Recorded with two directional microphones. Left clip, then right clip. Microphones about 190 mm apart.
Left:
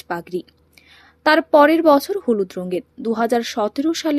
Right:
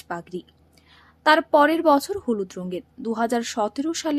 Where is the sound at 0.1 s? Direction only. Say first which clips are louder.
Left 6 dB; 20° left (ahead or behind).